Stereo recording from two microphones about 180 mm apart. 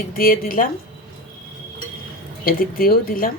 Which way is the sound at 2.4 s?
55° left (ahead or behind).